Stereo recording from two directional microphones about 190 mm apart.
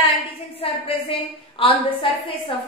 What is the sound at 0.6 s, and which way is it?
A woman's voice, 30° left (ahead or behind).